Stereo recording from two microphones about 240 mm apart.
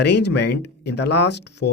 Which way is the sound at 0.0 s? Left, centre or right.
Left.